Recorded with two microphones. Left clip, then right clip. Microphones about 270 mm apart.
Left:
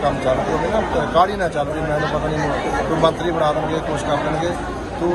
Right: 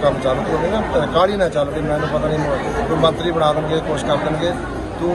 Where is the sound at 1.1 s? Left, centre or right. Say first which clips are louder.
Even; centre.